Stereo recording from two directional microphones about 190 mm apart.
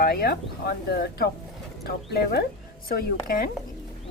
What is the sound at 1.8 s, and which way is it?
Speech, 60° left (ahead or behind).